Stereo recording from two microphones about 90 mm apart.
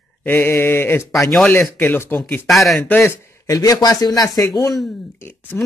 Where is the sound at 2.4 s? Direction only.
Centre (ahead or behind).